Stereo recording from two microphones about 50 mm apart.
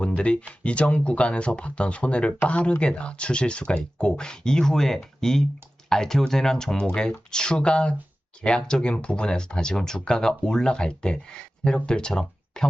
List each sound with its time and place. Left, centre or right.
0.1 s speech: left